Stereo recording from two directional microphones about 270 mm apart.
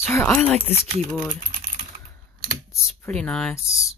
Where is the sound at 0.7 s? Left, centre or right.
Right.